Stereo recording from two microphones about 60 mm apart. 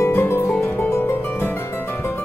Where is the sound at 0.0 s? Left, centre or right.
Left.